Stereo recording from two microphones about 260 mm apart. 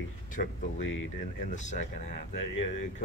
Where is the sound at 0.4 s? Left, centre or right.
Left.